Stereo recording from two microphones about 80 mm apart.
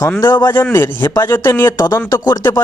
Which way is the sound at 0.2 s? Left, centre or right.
Left.